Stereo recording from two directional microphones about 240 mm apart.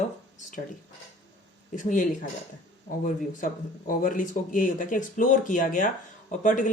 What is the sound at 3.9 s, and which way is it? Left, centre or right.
Speech, left.